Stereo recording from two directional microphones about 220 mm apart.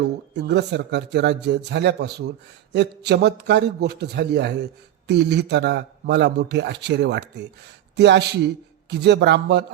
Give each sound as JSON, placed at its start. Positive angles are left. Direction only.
{"t": 0.3, "sound": "a man's voice", "side_deg": -50}